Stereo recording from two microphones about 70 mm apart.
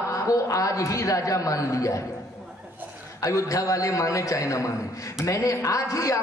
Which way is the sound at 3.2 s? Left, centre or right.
Left.